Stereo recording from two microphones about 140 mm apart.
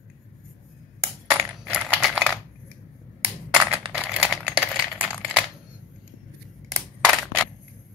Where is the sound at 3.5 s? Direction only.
10° right (ahead or behind).